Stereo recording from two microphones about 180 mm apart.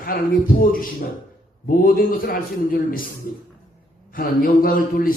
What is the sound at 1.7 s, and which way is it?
A man's voice, 50° left (ahead or behind).